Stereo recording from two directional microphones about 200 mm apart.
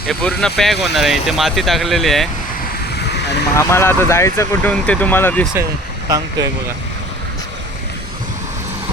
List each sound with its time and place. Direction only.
0.1 s speech: 5° left (ahead or behind)
3.6 s speech: 10° left (ahead or behind)
6.1 s speech: 20° right (ahead or behind)